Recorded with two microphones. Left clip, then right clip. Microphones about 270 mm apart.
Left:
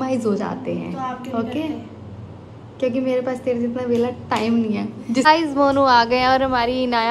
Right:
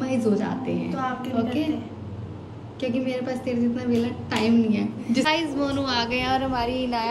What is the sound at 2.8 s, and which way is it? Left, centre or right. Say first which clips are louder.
A woman's voice: left 7 dB; centre.